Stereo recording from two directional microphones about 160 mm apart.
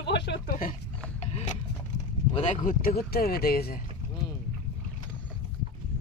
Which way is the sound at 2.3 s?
45° left (ahead or behind).